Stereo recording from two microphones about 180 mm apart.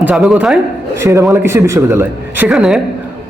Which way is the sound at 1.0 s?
15° right (ahead or behind).